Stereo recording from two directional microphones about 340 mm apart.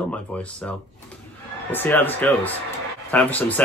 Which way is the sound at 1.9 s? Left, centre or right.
Centre.